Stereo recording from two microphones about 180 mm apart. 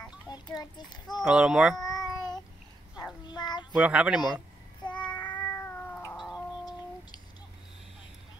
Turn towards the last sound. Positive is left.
turn(degrees=0)  # may be behind; listen again after turning